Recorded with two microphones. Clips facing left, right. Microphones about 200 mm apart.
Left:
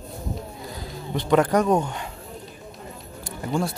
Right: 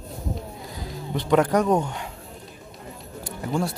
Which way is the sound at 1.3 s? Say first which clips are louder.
Even; centre (ahead or behind).